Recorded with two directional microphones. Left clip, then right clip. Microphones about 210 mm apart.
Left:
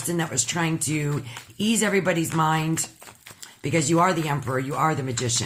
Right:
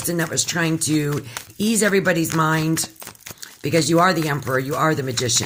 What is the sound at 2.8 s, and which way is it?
Crumpling, 50° right (ahead or behind).